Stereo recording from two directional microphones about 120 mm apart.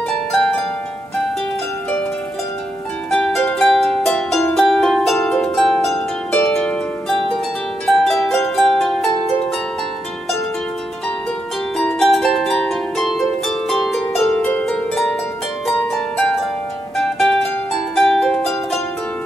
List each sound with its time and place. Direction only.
3.1 s harp: 5° left (ahead or behind)
3.5 s music: centre (ahead or behind)
4.6 s harp: centre (ahead or behind)
11.8 s harp: centre (ahead or behind)
14.3 s harp: 15° left (ahead or behind)
14.7 s harp: 5° left (ahead or behind)
16.2 s harp: 5° left (ahead or behind)
16.9 s music: centre (ahead or behind)
17.9 s harp: centre (ahead or behind)